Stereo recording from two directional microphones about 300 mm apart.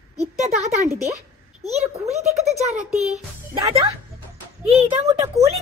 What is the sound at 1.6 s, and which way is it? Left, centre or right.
Music, right.